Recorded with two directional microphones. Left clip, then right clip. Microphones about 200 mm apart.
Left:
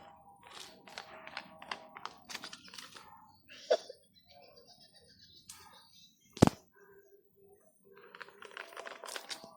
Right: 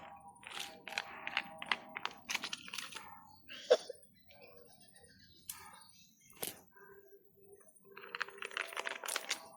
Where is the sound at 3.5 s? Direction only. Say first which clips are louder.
Right 1 dB; 50° right (ahead or behind).